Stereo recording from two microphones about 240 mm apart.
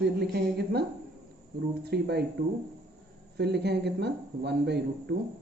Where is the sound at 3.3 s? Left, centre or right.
Right.